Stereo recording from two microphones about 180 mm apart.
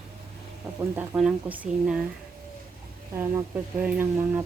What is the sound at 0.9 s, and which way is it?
A woman's voice, 5° right (ahead or behind).